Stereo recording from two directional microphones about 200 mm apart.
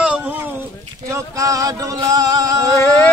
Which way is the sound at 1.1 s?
15° right (ahead or behind).